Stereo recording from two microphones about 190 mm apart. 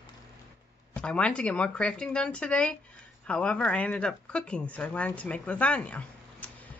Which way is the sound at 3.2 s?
5° left (ahead or behind).